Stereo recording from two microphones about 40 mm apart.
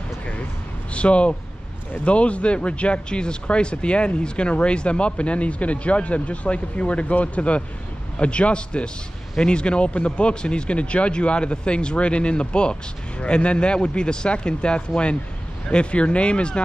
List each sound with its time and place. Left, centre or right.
0.9 s speech: left